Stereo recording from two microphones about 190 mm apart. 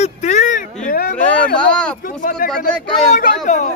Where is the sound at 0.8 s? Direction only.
50° left (ahead or behind).